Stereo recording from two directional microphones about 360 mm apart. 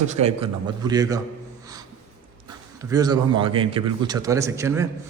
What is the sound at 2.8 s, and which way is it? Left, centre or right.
A man's voice, centre.